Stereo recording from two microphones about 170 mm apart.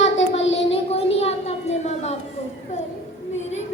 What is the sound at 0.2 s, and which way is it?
Child singing, 90° left.